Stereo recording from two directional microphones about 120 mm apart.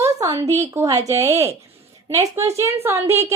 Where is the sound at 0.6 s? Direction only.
25° right (ahead or behind).